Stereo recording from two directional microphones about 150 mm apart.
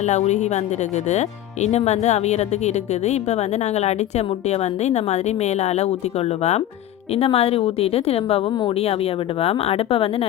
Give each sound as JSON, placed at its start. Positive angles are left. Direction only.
{"t": 0.0, "sound": "a woman's voice", "side_deg": 50}